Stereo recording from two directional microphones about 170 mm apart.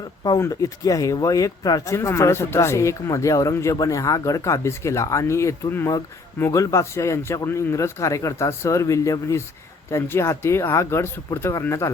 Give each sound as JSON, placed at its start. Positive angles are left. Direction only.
{"t": 0.2, "sound": "speech", "side_deg": 20}